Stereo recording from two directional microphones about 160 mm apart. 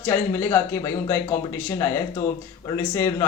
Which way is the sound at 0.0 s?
15° left (ahead or behind).